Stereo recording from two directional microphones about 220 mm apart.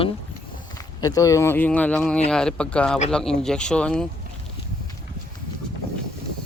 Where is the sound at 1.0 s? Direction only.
15° left (ahead or behind).